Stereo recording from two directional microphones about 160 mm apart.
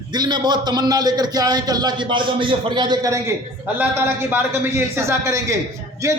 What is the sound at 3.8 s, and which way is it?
A man's voice, 15° right (ahead or behind).